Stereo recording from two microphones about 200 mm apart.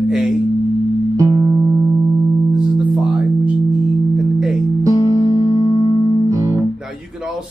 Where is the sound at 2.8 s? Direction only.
5° right (ahead or behind).